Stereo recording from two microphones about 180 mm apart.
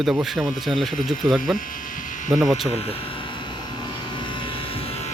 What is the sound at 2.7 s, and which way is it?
Vehicle, 35° left (ahead or behind).